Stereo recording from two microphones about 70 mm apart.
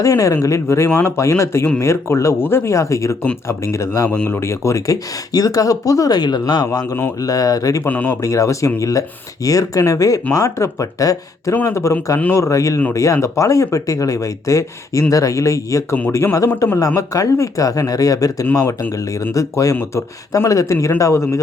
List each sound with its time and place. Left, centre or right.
0.0 s speech: left
5.3 s speech: left
6.1 s speech: left
7.2 s speech: left
7.9 s speech: left
8.2 s speech: left
11.6 s speech: left
18.6 s speech: left
19.3 s speech: left